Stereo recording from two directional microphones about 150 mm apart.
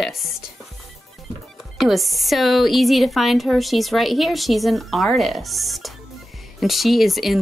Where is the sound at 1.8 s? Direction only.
Centre (ahead or behind).